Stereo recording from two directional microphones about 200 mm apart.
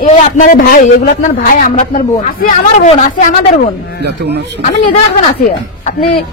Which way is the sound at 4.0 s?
55° right (ahead or behind).